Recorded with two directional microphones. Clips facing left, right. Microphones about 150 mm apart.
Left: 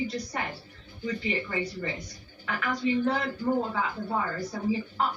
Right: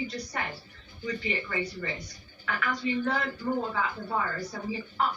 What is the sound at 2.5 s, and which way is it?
Speech, 20° left (ahead or behind).